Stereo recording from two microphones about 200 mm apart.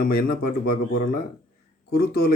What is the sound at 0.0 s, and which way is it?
A man's voice, 50° left (ahead or behind).